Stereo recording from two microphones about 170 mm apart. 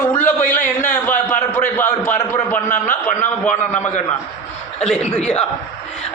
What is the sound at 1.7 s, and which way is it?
A man's voice, 10° left (ahead or behind).